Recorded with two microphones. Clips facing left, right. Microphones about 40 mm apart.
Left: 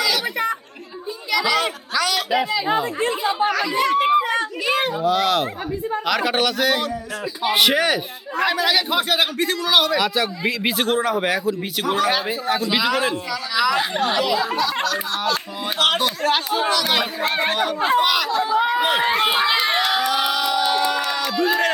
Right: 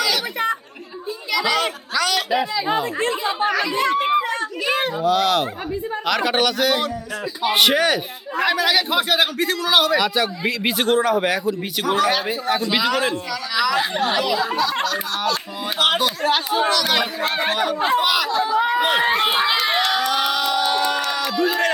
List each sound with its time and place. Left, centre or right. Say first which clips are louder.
1.3 s a child's voice: left 1 dB; centre
4.2 s children playing: left 2 dB; left
4.9 s speech: right 1 dB; centre
16.6 s speech: right 1 dB; centre
19.9 s crowd: even; centre
21.2 s a sound: left 1 dB; centre